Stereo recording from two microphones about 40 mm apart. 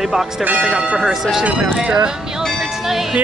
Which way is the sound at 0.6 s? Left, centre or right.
Right.